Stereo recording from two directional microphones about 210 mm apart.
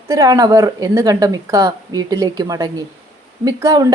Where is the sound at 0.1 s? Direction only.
15° right (ahead or behind).